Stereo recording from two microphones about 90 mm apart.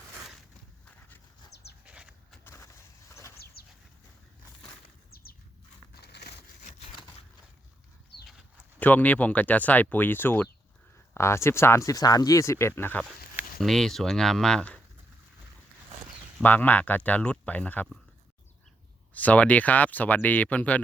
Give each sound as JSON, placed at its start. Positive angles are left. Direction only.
{"t": 1.8, "sound": "a sound", "side_deg": -10}
{"t": 2.4, "sound": "vehicle", "side_deg": 25}
{"t": 8.8, "sound": "speech", "side_deg": 20}
{"t": 13.6, "sound": "speech", "side_deg": 5}
{"t": 16.4, "sound": "speech", "side_deg": 20}
{"t": 19.1, "sound": "speech", "side_deg": 15}